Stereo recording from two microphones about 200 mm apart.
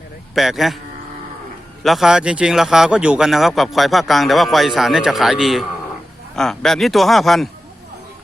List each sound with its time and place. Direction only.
0.3 s speech: centre (ahead or behind)
1.8 s speech: centre (ahead or behind)